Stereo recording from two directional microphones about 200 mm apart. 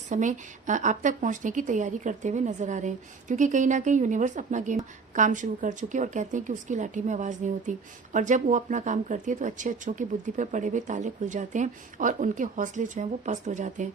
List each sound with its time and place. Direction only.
0.1 s a woman's voice: 40° right (ahead or behind)